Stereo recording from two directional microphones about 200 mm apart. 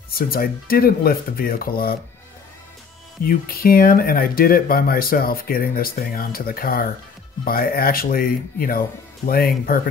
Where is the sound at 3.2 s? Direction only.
45° left (ahead or behind).